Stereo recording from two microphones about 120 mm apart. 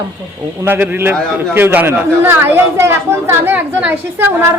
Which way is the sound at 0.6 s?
15° right (ahead or behind).